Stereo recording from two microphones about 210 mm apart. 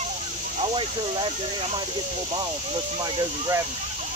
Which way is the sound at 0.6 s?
25° right (ahead or behind).